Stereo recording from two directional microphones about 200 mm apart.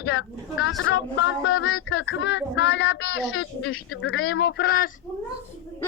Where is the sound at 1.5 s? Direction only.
80° left.